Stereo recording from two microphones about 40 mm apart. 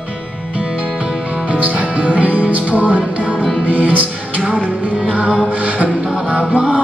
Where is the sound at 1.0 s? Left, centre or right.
Right.